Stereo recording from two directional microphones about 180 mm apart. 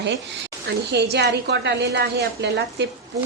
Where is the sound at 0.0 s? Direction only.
80° right.